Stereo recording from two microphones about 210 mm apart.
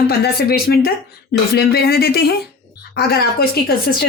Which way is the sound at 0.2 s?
45° left (ahead or behind).